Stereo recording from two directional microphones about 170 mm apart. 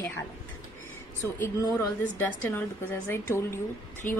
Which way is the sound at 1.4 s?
20° left (ahead or behind).